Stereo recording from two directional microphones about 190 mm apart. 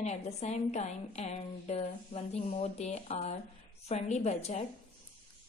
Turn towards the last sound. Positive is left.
turn(degrees=35)  # may be behind; listen again after turning